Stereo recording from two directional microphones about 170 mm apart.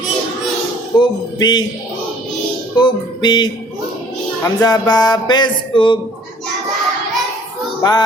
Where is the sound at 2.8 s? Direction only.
25° left (ahead or behind).